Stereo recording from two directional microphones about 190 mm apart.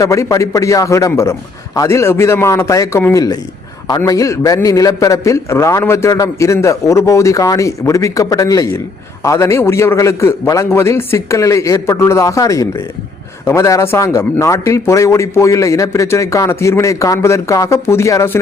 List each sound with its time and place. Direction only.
0.0 s a man's voice: 15° left (ahead or behind)